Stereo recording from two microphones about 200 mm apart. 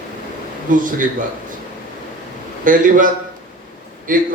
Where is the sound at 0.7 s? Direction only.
40° right (ahead or behind).